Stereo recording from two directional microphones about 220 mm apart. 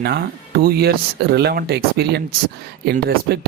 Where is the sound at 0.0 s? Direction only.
45° right (ahead or behind).